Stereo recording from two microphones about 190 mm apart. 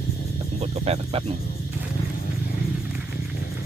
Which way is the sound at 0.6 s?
35° right (ahead or behind).